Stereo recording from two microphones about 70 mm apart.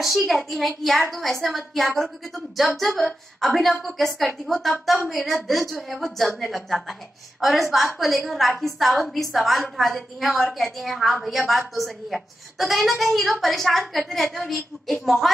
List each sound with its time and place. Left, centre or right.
0.0 s a woman's voice: centre